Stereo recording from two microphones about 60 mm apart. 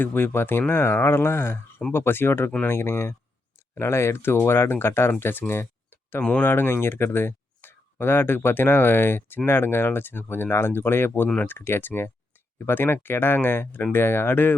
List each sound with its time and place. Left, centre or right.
0.0 s speech: left